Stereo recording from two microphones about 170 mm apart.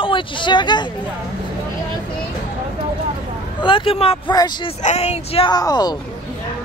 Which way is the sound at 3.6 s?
30° left (ahead or behind).